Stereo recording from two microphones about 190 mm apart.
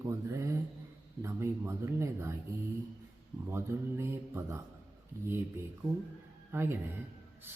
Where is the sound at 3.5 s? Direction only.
15° right (ahead or behind).